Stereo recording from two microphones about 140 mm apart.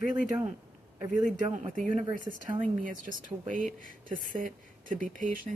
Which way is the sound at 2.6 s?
75° right (ahead or behind).